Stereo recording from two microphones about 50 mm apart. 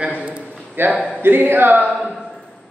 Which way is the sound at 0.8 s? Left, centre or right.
Right.